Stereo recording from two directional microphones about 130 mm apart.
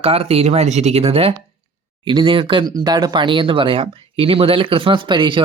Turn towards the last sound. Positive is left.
turn(degrees=-40)  # may be behind; listen again after turning